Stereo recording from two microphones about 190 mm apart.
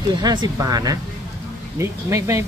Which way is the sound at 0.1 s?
25° right (ahead or behind).